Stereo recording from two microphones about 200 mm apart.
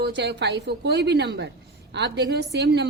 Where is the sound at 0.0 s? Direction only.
60° right (ahead or behind).